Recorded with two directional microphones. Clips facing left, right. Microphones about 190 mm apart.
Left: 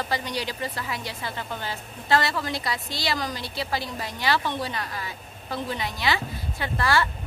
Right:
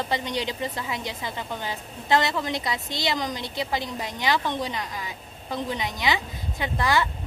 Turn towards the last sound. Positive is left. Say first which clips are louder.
# even
turn(degrees=-15)  # may be behind; listen again after turning